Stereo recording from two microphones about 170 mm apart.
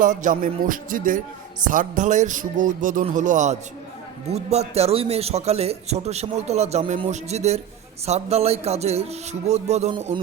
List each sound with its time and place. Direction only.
0.0 s music: 50° right (ahead or behind)
4.3 s a man's voice: 40° right (ahead or behind)